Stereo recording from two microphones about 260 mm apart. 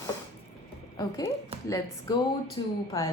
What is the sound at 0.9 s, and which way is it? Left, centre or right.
A woman's voice, centre.